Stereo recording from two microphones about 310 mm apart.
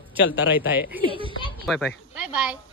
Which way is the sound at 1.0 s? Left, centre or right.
Centre.